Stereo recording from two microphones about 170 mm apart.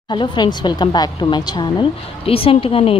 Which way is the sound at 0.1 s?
25° left (ahead or behind).